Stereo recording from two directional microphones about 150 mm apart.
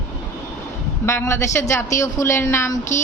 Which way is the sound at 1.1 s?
15° left (ahead or behind).